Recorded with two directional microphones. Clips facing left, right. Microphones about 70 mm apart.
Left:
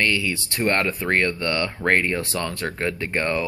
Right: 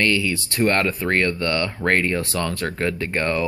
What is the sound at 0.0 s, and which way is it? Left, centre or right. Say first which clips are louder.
Speech: right 2 dB; centre.